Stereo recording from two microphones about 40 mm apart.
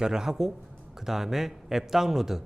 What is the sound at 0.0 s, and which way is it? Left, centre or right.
A man's voice, centre.